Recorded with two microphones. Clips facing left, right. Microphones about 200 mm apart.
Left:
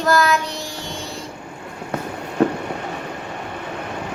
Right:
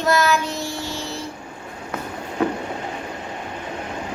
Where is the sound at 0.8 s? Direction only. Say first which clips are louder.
Right 1 dB; 5° right (ahead or behind).